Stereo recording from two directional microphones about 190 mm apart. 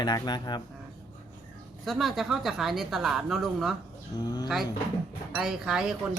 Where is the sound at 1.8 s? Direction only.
Centre (ahead or behind).